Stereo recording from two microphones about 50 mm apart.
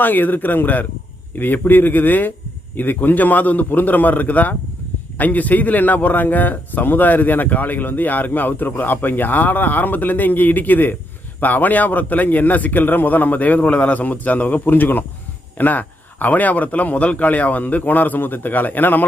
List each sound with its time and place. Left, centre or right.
0.0 s a man's voice: left